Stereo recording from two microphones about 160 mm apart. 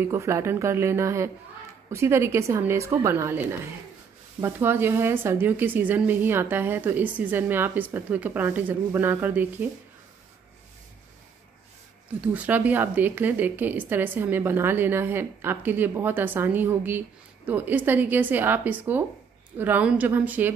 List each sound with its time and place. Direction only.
0.0 s speech: 15° right (ahead or behind)
4.4 s speech: 15° right (ahead or behind)
12.2 s speech: 10° right (ahead or behind)